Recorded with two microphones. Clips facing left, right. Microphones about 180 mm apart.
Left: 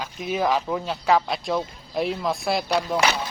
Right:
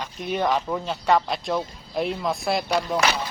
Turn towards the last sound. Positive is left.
turn(degrees=5)  # may be behind; listen again after turning